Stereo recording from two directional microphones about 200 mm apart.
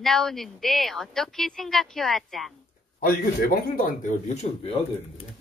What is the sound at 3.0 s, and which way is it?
A man's voice, 45° left (ahead or behind).